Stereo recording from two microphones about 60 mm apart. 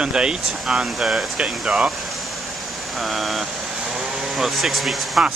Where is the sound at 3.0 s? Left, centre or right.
Centre.